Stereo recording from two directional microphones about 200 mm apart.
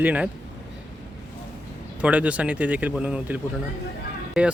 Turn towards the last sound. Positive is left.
turn(degrees=-5)  # may be behind; listen again after turning